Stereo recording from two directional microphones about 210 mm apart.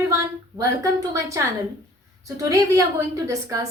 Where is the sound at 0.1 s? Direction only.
15° right (ahead or behind).